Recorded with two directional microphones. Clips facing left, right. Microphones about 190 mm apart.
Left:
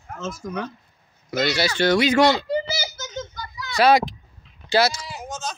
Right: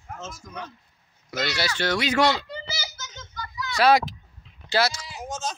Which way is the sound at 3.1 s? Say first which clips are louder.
Left 7 dB; 45° left (ahead or behind).